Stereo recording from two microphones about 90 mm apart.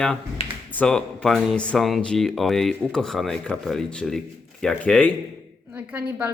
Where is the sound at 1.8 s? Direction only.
Centre (ahead or behind).